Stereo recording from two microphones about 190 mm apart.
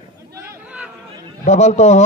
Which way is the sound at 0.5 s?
5° right (ahead or behind).